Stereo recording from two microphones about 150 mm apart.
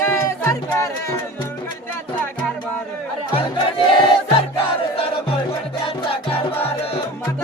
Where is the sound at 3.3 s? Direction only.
35° left (ahead or behind).